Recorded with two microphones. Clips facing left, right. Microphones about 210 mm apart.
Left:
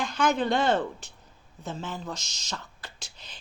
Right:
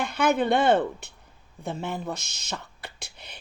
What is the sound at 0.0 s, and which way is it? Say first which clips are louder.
Speech: right 2 dB; 60° right (ahead or behind).